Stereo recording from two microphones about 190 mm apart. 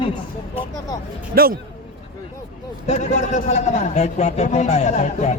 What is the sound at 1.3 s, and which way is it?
Speech, 55° right (ahead or behind).